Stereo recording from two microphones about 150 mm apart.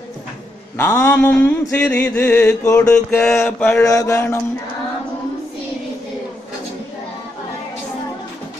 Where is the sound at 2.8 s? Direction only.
5° left (ahead or behind).